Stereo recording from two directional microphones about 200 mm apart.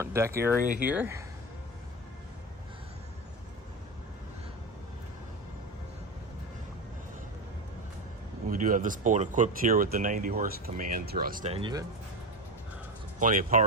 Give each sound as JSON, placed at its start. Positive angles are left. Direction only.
{"t": 0.0, "sound": "speech", "side_deg": -15}
{"t": 0.6, "sound": "speech", "side_deg": -45}
{"t": 0.9, "sound": "speech", "side_deg": -10}
{"t": 8.4, "sound": "speech", "side_deg": -45}
{"t": 11.5, "sound": "speech", "side_deg": -20}
{"t": 13.1, "sound": "speech", "side_deg": -40}